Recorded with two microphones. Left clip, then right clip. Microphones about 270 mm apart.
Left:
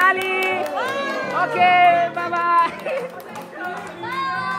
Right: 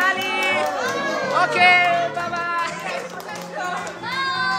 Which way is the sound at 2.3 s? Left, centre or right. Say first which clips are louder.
Left 10 dB; centre.